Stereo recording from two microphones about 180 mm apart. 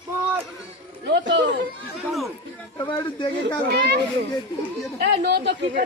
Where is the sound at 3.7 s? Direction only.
65° right (ahead or behind).